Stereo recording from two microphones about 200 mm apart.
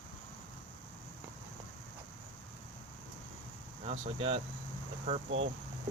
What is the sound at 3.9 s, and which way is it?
Speech, 30° right (ahead or behind).